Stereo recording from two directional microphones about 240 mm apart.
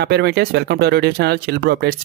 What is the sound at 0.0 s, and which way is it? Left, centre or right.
Speech, right.